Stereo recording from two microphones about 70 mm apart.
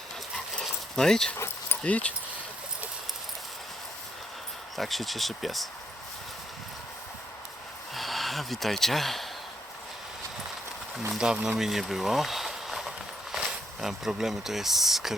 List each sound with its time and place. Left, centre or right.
0.9 s speech: centre
1.8 s speech: centre
4.8 s speech: centre
7.9 s speech: centre
11.1 s speech: centre